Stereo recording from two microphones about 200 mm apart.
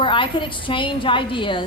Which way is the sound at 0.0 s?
25° left (ahead or behind).